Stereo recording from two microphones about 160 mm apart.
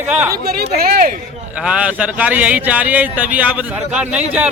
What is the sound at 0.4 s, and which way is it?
Speech, 70° right (ahead or behind).